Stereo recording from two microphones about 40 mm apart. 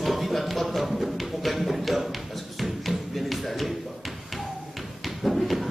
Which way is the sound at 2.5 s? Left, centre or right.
Centre.